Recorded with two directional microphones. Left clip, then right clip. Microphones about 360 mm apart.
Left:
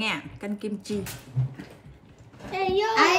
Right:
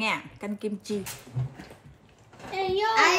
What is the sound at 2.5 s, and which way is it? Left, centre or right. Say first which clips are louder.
Speech: left 1 dB; centre.